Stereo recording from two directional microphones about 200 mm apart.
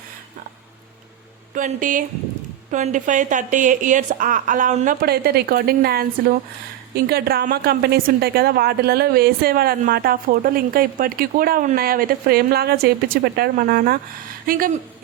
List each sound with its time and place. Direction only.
1.5 s a woman's voice: 40° right (ahead or behind)